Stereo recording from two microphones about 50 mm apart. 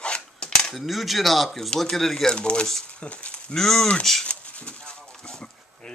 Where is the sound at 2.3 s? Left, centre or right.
Centre.